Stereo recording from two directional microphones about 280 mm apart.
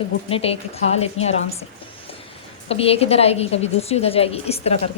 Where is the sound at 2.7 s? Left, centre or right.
Left.